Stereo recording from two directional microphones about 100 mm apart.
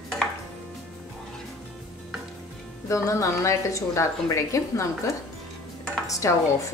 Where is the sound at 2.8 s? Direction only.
30° left (ahead or behind).